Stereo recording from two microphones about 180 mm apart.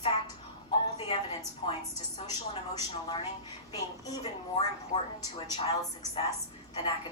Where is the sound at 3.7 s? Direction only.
20° left (ahead or behind).